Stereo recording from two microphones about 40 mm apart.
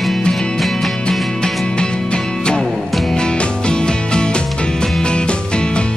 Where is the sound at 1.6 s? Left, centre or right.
Left.